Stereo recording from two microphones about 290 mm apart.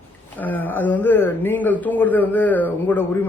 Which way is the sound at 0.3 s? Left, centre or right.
Centre.